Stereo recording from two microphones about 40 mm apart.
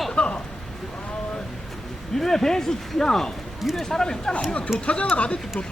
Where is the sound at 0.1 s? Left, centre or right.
Left.